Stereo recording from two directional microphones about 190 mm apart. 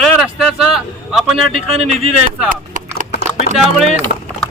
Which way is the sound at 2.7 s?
45° right (ahead or behind).